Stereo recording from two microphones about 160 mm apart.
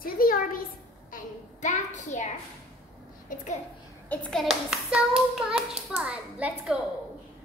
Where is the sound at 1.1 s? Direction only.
50° left (ahead or behind).